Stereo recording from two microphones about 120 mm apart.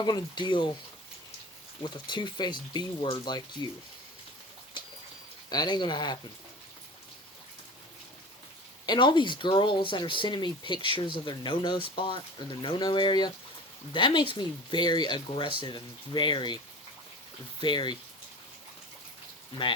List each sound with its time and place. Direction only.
0.0 s speech: 40° left (ahead or behind)
2.0 s speech: 40° left (ahead or behind)
5.5 s speech: 35° left (ahead or behind)
8.9 s speech: 40° left (ahead or behind)
17.6 s speech: 40° left (ahead or behind)